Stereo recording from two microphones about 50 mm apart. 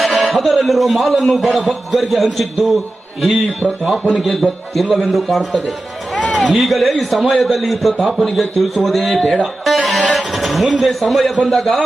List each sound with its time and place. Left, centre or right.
0.0 s a sound: centre
0.3 s a man's voice: centre
6.1 s a sound: left
6.5 s a man's voice: centre
9.1 s speech: centre
9.6 s a man's voice: centre